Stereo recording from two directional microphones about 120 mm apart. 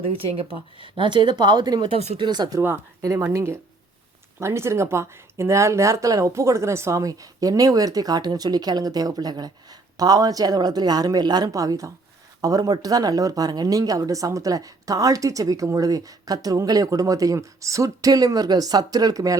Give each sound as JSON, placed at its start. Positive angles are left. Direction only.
{"t": 0.0, "sound": "speech", "side_deg": -50}
{"t": 1.9, "sound": "speech", "side_deg": -65}
{"t": 2.1, "sound": "speech", "side_deg": -40}
{"t": 2.6, "sound": "speech", "side_deg": -20}